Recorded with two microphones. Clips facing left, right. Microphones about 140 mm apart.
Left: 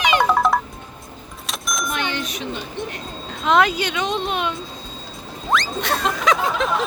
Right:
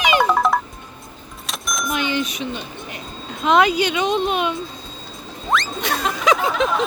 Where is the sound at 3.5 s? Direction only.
Centre (ahead or behind).